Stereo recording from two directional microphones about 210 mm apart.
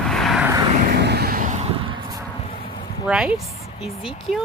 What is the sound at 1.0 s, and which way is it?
Vehicle, 50° right (ahead or behind).